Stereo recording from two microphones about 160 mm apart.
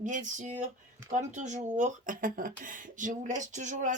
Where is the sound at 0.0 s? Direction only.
50° right (ahead or behind).